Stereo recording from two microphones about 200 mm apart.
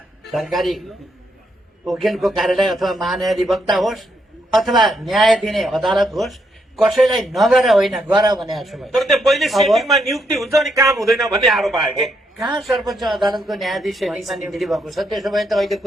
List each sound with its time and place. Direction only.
0.3 s a man's voice: centre (ahead or behind)
1.8 s a man's voice: centre (ahead or behind)
8.1 s a man's voice: 20° right (ahead or behind)
8.5 s a man's voice: centre (ahead or behind)